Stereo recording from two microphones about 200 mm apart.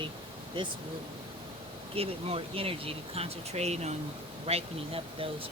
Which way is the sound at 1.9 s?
30° right (ahead or behind).